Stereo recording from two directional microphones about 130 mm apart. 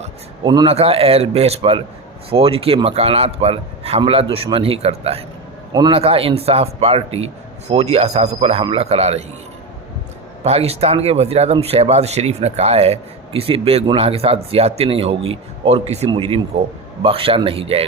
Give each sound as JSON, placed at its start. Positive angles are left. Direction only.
{"t": 0.4, "sound": "a man's voice", "side_deg": -35}
{"t": 0.7, "sound": "speech", "side_deg": -50}
{"t": 10.4, "sound": "speech", "side_deg": -50}
{"t": 16.0, "sound": "a man's voice", "side_deg": -40}